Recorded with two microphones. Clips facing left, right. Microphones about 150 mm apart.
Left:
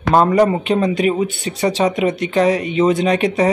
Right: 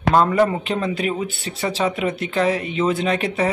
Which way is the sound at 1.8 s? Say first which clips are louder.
Left 4 dB; 10° left (ahead or behind).